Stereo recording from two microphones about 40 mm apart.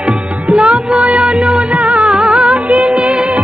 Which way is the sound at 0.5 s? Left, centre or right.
Right.